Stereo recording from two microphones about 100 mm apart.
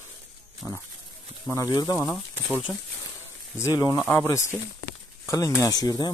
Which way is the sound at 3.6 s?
30° left (ahead or behind).